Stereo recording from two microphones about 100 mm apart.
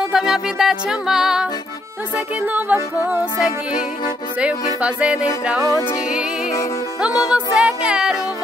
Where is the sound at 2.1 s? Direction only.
20° right (ahead or behind).